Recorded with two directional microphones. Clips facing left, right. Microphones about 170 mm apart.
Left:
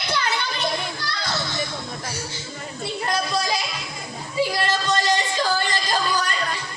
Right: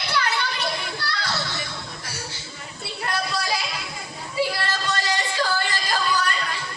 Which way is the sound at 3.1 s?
20° left (ahead or behind).